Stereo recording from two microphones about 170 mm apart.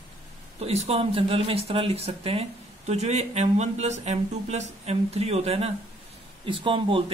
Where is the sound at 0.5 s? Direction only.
35° right (ahead or behind).